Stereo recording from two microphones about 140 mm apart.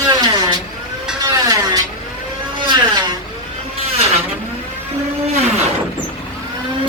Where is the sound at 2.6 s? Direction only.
35° right (ahead or behind).